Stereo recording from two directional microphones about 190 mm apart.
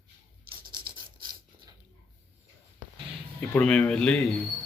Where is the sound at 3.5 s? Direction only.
5° left (ahead or behind).